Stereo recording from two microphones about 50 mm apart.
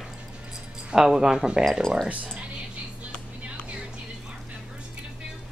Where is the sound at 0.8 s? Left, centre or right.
Centre.